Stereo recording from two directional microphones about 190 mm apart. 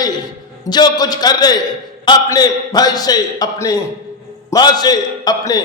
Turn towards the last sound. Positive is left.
turn(degrees=20)  # may be behind; listen again after turning